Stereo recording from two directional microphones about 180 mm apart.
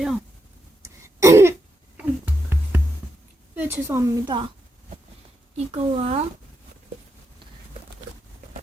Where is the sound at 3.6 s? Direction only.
10° right (ahead or behind).